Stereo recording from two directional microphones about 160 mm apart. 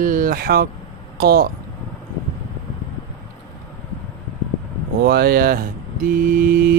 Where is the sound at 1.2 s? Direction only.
75° right (ahead or behind).